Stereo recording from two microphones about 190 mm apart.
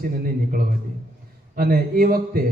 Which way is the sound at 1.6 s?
50° right (ahead or behind).